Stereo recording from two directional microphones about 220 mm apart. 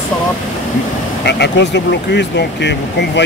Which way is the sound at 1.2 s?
50° left (ahead or behind).